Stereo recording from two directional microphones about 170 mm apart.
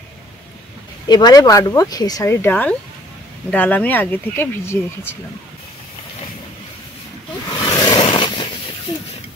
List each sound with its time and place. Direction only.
1.0 s speech: 25° left (ahead or behind)
7.4 s roar: 20° left (ahead or behind)
8.9 s a sound: 25° left (ahead or behind)